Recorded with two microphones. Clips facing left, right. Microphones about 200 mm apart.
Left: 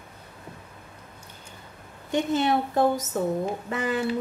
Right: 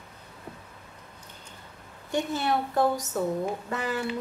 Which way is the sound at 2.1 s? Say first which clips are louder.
Left 4 dB; 20° left (ahead or behind).